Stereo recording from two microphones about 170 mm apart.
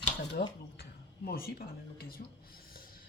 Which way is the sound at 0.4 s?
60° left (ahead or behind).